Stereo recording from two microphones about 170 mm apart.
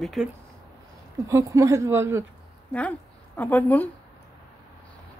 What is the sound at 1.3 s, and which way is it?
Speech, 20° right (ahead or behind).